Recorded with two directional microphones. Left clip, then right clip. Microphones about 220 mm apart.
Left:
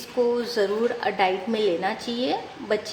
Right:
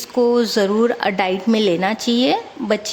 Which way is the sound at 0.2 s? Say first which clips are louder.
Right 7 dB; 50° right (ahead or behind).